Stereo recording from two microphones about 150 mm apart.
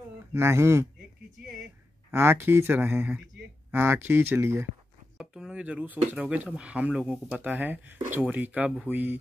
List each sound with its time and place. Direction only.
0.3 s speech: 15° right (ahead or behind)
2.0 s speech: 15° right (ahead or behind)
5.1 s a sound: 5° right (ahead or behind)
6.1 s speech: 10° right (ahead or behind)